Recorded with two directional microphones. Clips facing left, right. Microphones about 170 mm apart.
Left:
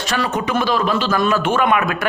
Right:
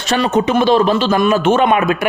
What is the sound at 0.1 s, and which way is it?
Speech, 25° right (ahead or behind).